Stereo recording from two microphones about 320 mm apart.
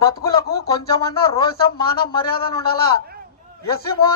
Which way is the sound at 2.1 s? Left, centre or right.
Centre.